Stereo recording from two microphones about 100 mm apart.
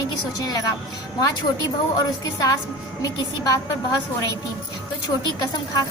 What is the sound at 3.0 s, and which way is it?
Speech, 40° left (ahead or behind).